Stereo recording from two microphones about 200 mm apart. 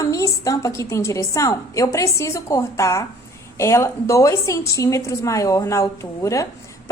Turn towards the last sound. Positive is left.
turn(degrees=15)  # may be behind; listen again after turning